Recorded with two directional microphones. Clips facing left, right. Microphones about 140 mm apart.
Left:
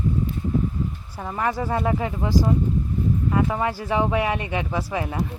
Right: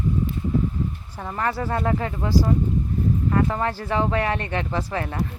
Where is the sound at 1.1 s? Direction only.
5° left (ahead or behind).